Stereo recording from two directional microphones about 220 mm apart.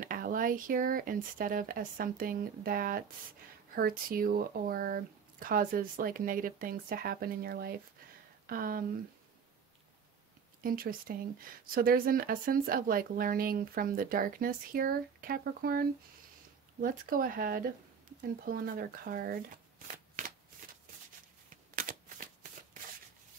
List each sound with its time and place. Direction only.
0.0 s speech: 40° right (ahead or behind)
10.6 s speech: 40° right (ahead or behind)
21.5 s shuffling cards: 40° right (ahead or behind)